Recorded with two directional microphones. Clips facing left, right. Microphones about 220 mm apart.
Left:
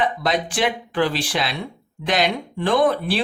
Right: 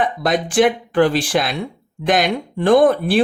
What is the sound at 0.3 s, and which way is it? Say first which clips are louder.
Speech: right 11 dB; 50° right (ahead or behind).